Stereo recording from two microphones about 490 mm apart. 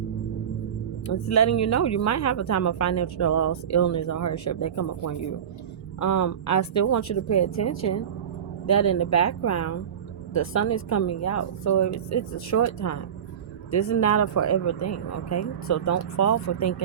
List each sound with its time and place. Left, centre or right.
1.0 s speech: left